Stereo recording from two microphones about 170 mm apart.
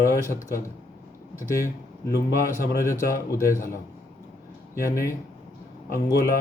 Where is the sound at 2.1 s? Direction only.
60° left (ahead or behind).